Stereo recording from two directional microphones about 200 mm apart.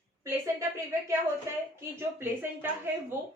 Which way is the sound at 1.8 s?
10° right (ahead or behind).